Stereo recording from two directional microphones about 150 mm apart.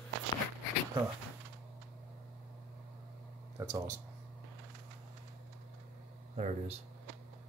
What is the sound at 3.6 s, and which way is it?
Speech, 25° right (ahead or behind).